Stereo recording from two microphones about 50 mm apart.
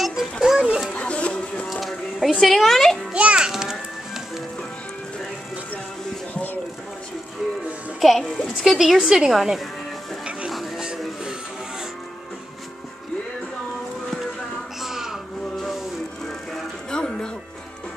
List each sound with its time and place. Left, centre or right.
0.0 s children playing: centre
0.9 s a sound: left
1.7 s music: centre
2.4 s a woman's voice: centre
3.1 s a child's voice: right
3.3 s music: centre
8.0 s a woman's voice: centre
10.8 s music: centre
14.8 s crow: centre
16.9 s music: centre